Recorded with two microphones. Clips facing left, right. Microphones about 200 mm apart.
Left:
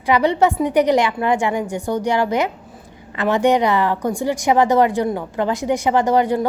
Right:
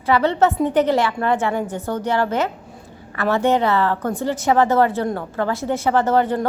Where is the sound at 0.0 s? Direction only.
15° left (ahead or behind).